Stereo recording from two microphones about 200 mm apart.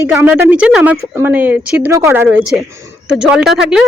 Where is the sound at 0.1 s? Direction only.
10° right (ahead or behind).